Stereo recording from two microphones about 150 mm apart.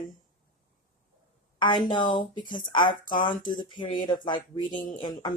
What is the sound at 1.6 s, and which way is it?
Speech, 30° left (ahead or behind).